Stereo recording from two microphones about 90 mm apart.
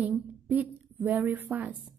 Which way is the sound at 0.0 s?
15° right (ahead or behind).